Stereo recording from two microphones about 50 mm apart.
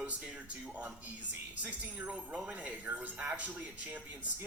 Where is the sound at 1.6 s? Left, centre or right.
Right.